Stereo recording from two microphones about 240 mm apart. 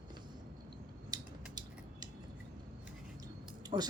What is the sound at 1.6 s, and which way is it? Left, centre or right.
Cutlery, centre.